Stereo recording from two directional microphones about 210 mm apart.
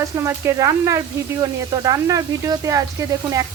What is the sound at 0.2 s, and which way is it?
Speech, 15° right (ahead or behind).